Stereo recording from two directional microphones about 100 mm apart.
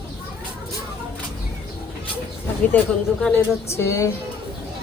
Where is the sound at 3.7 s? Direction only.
30° left (ahead or behind).